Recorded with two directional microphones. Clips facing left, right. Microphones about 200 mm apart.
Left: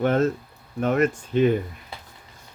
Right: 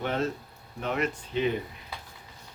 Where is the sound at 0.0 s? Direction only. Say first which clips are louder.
Left 8 dB; 50° left (ahead or behind).